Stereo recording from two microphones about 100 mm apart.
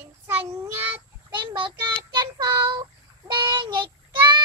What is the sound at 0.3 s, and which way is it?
Child singing, 20° right (ahead or behind).